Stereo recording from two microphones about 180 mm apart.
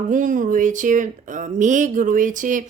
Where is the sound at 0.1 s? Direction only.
45° right (ahead or behind).